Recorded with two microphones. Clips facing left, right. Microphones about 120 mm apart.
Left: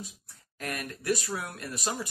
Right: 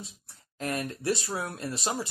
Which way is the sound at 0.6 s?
30° right (ahead or behind).